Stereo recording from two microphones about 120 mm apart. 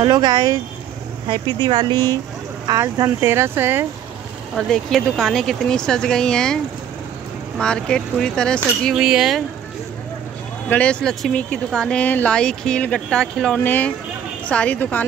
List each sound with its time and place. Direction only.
0.0 s speech: 35° right (ahead or behind)
2.8 s speech: 20° right (ahead or behind)
4.6 s speech: 5° left (ahead or behind)
8.9 s speech: 5° right (ahead or behind)
10.7 s speech: 10° left (ahead or behind)